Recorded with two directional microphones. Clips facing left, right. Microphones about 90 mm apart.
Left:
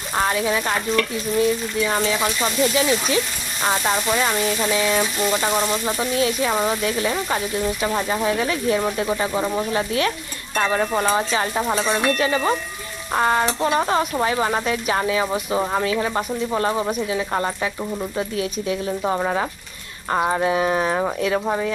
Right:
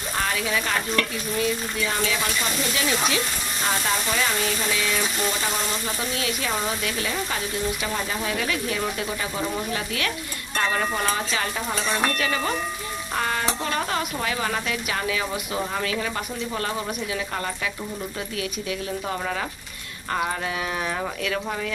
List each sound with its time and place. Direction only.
0.2 s frying: 30° left (ahead or behind)
1.4 s speech: 30° left (ahead or behind)